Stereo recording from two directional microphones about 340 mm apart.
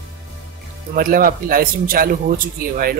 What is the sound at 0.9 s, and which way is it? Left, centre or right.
Speech, right.